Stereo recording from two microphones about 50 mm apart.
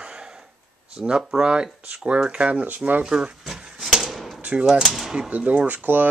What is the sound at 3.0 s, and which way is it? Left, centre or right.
Speech, centre.